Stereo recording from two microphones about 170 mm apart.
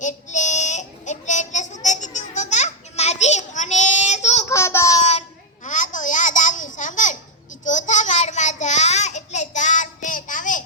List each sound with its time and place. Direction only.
0.0 s child singing: 45° left (ahead or behind)
4.4 s child singing: 15° left (ahead or behind)
5.6 s babbling: 50° left (ahead or behind)
7.6 s child singing: 45° left (ahead or behind)